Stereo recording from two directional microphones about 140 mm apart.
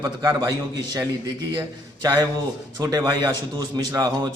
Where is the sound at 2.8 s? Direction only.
25° right (ahead or behind).